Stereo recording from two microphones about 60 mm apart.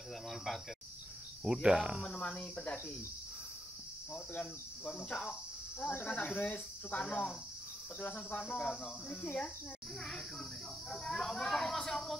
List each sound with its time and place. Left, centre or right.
1.4 s speech: centre
2.0 s speech: centre
4.8 s speech: centre
5.9 s speech: left
10.9 s speech: centre